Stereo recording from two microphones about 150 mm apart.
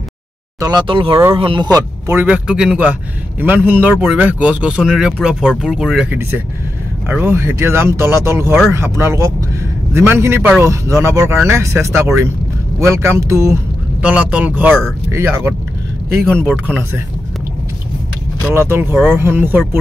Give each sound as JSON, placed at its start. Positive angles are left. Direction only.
{"t": 0.6, "sound": "speech", "side_deg": -25}
{"t": 1.8, "sound": "a man's voice", "side_deg": -15}
{"t": 7.1, "sound": "a man's voice", "side_deg": -15}
{"t": 14.0, "sound": "a man's voice", "side_deg": -10}
{"t": 18.5, "sound": "a man's voice", "side_deg": -15}